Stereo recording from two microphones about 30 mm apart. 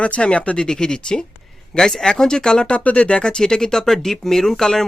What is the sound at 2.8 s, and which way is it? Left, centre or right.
Speech, left.